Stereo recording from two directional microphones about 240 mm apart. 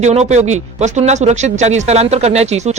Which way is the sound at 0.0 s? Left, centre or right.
Right.